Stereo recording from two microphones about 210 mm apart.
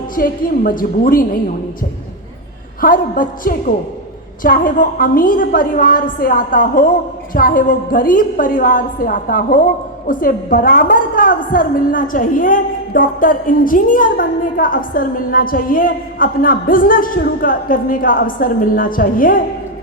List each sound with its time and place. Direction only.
0.2 s a woman's voice: 45° left (ahead or behind)
2.8 s a woman's voice: 40° left (ahead or behind)